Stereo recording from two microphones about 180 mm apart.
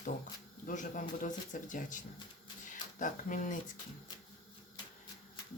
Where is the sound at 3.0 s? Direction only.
45° left (ahead or behind).